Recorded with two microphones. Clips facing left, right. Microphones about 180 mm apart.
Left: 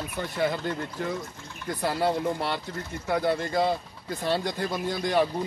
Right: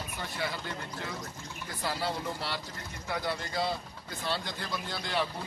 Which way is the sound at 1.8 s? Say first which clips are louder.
Left 8 dB; 55° left (ahead or behind).